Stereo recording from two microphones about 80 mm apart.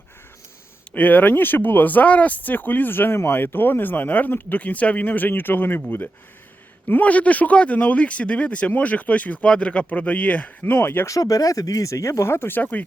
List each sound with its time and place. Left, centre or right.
0.9 s speech: left
6.8 s speech: left
11.0 s speech: left